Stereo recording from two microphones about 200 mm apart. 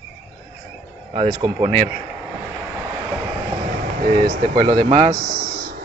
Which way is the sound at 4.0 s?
40° right (ahead or behind).